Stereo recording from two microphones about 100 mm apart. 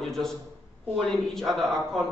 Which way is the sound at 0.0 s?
5° left (ahead or behind).